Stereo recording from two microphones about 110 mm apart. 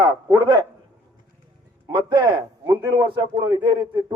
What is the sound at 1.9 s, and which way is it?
A man's voice, 40° right (ahead or behind).